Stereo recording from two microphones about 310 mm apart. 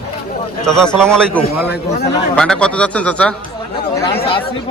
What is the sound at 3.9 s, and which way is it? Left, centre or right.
Chatter, centre.